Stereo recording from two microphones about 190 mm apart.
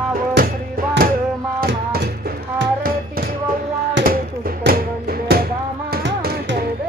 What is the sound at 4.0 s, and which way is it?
Music, 50° right (ahead or behind).